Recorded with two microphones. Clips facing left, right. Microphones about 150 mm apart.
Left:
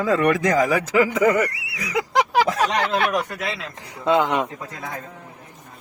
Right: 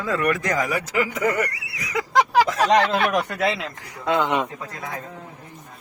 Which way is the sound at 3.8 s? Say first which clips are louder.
Left 6 dB; 25° left (ahead or behind).